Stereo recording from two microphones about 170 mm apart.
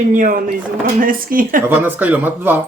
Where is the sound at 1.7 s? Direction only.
10° right (ahead or behind).